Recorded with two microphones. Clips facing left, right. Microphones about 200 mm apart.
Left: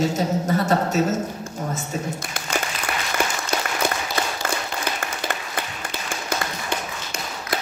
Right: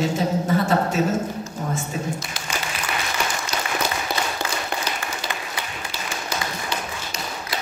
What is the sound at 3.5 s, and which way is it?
Applause, 55° left (ahead or behind).